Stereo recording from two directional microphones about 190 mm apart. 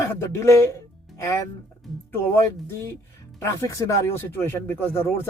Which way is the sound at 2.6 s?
10° left (ahead or behind).